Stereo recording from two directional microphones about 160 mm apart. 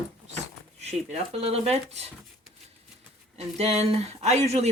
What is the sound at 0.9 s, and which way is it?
Speech, 40° right (ahead or behind).